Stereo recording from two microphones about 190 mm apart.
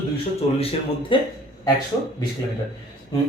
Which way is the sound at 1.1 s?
25° left (ahead or behind).